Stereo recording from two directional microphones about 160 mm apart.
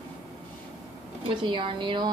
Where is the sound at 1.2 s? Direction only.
30° right (ahead or behind).